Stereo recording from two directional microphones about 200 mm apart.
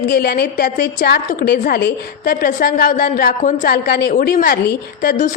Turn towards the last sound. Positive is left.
turn(degrees=40)  # may be behind; listen again after turning